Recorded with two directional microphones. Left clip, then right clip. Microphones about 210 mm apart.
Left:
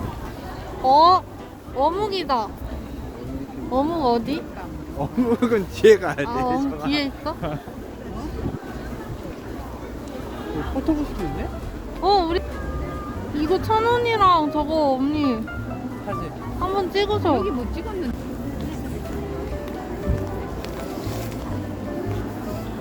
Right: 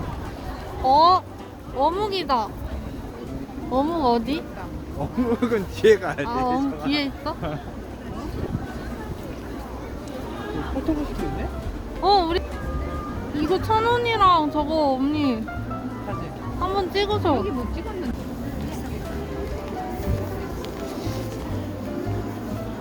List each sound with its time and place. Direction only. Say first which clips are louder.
0.9 s speech: left 2 dB; 10° left (ahead or behind)
3.7 s speech: even; centre (ahead or behind)
5.2 s speech: left 2 dB; 55° left (ahead or behind)
6.2 s speech: even; centre (ahead or behind)
12.0 s speech: even; 5° right (ahead or behind)
13.4 s speech: left 1 dB; centre (ahead or behind)
16.6 s speech: left 1 dB; 5° left (ahead or behind)